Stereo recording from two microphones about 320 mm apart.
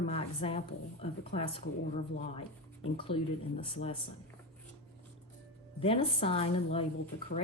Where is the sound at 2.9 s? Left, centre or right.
Centre.